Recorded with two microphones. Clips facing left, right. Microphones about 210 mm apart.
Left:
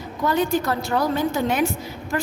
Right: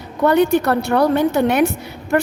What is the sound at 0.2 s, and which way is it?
A woman's voice, 65° right (ahead or behind).